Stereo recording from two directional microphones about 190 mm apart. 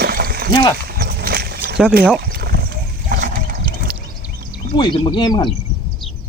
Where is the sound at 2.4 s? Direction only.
55° right (ahead or behind).